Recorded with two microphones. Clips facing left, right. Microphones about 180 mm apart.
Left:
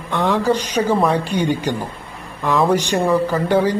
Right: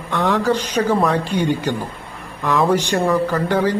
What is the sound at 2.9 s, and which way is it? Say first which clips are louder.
Speech: even; 15° left (ahead or behind).